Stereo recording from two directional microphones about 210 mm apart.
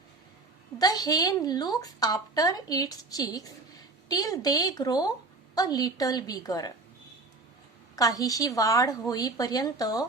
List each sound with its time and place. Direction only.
0.8 s a woman's voice: 15° left (ahead or behind)
7.9 s a woman's voice: 15° left (ahead or behind)